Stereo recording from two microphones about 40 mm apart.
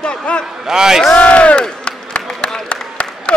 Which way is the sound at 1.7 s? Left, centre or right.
Centre.